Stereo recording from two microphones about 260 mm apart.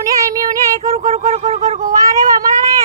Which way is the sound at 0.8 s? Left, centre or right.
Right.